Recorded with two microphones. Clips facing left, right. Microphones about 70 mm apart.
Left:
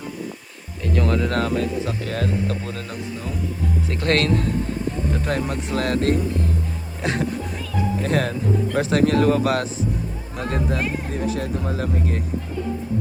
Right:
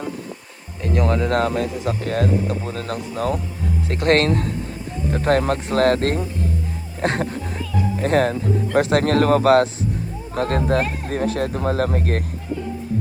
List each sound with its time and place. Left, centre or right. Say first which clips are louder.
0.9 s speech: right 2 dB; right
2.8 s speech: right 7 dB; right
3.8 s speech: right 4 dB; right
5.1 s speech: right 10 dB; right
10.3 s speech: right 5 dB; right